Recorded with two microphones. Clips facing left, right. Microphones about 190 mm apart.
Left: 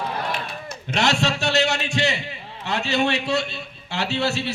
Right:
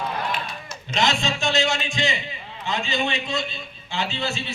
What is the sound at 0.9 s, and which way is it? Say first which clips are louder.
A man's voice: left 2 dB; 70° left (ahead or behind).